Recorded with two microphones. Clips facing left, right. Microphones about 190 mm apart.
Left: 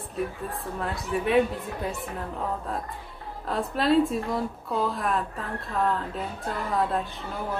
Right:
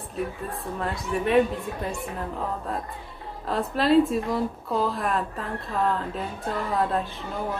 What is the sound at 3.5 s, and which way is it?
A woman's voice, centre (ahead or behind).